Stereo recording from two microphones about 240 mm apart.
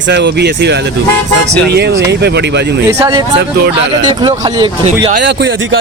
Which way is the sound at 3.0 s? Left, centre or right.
Centre.